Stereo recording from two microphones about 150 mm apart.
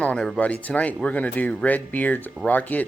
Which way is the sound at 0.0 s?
5° left (ahead or behind).